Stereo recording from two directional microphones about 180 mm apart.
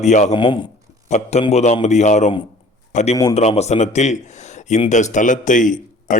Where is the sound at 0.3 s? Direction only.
25° left (ahead or behind).